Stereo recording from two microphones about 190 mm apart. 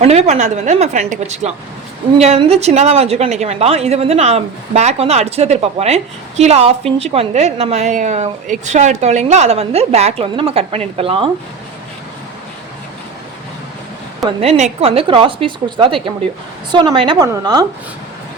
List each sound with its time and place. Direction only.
0.0 s a woman's voice: 35° right (ahead or behind)
14.3 s a woman's voice: 35° right (ahead or behind)